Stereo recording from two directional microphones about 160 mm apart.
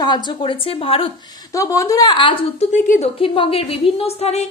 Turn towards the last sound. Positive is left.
turn(degrees=40)  # may be behind; listen again after turning